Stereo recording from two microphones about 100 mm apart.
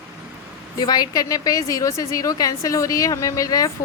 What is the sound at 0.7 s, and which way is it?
A woman's voice, 40° left (ahead or behind).